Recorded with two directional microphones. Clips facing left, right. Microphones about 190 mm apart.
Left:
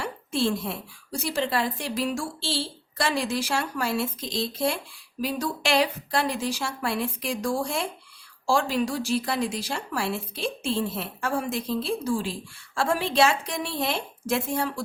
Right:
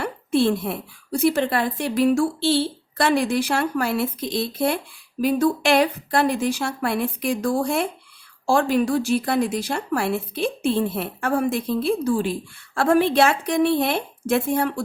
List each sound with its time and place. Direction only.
0.0 s a woman's voice: 60° right (ahead or behind)